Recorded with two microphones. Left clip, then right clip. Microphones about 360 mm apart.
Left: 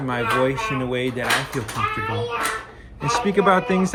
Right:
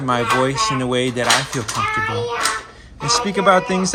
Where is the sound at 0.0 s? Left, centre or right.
Centre.